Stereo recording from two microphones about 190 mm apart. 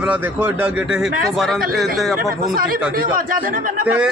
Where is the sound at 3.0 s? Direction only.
45° right (ahead or behind).